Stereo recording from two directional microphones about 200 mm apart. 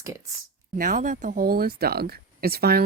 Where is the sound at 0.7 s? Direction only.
40° right (ahead or behind).